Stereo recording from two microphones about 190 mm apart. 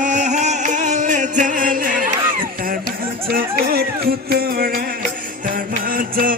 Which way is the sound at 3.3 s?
50° right (ahead or behind).